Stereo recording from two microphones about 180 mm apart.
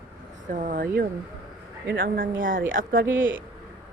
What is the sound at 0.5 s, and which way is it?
A woman's voice, 50° right (ahead or behind).